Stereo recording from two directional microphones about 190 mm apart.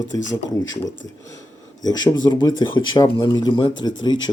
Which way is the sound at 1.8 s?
20° left (ahead or behind).